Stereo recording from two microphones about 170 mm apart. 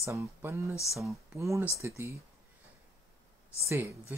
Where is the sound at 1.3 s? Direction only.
15° right (ahead or behind).